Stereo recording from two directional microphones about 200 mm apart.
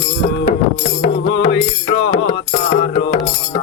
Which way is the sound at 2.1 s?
25° left (ahead or behind).